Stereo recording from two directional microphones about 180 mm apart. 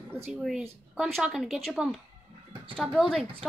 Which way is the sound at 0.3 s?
5° right (ahead or behind).